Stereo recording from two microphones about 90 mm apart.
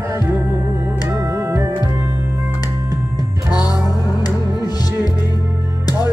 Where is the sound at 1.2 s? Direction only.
40° right (ahead or behind).